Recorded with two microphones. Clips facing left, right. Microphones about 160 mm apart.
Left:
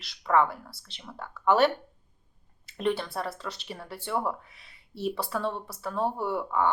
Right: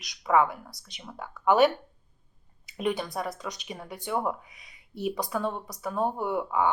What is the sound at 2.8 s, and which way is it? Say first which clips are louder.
Speech: even; 15° right (ahead or behind).